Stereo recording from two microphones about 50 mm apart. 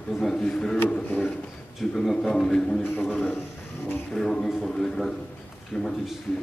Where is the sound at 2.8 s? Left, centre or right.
Left.